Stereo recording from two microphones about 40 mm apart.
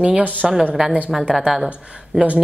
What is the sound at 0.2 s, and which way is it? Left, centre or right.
Speech, right.